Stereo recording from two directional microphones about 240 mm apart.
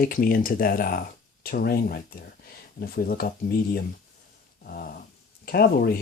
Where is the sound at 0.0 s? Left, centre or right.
Left.